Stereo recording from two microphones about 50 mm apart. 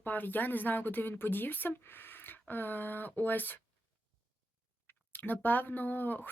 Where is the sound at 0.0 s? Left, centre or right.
Left.